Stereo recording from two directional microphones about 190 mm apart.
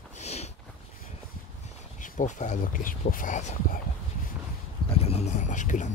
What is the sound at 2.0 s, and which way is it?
Speech, 40° left (ahead or behind).